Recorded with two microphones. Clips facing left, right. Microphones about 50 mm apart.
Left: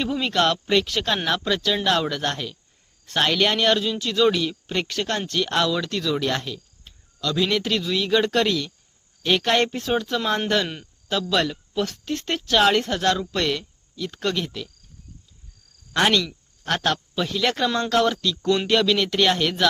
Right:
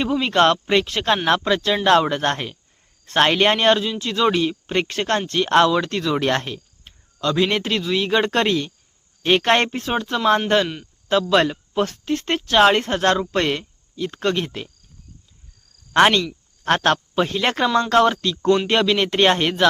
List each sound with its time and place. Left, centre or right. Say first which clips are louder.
0.3 s speech: right 4 dB; right
1.5 s speech: right 4 dB; right
15.9 s speech: right 5 dB; right